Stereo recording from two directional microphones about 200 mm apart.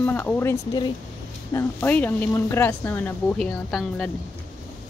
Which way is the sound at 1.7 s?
10° left (ahead or behind).